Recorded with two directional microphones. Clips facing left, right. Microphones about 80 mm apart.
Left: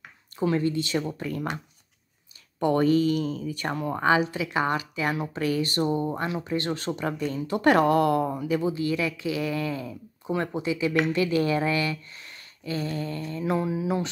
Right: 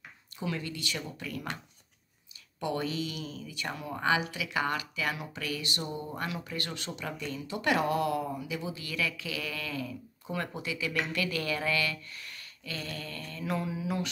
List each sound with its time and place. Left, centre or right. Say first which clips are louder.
0.4 s speech: left 11 dB; left
2.6 s speech: left 11 dB; left
6.1 s speech: left 8 dB; left